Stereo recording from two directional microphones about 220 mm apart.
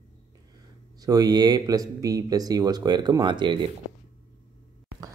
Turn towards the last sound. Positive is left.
turn(degrees=-20)  # may be behind; listen again after turning